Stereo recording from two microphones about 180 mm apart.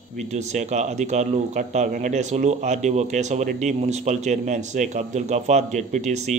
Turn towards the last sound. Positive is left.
turn(degrees=-40)  # may be behind; listen again after turning